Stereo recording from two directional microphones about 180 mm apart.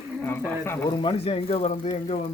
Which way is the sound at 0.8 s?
25° left (ahead or behind).